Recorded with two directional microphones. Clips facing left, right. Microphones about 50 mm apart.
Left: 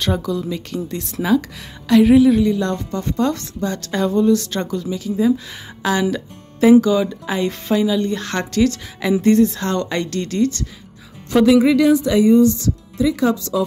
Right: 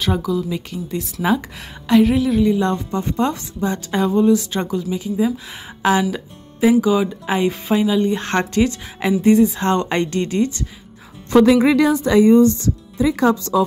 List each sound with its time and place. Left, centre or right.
0.0 s speech: centre
2.4 s a woman's voice: centre
5.8 s music: right
6.0 s a woman's voice: centre
9.6 s speech: right
11.3 s speech: right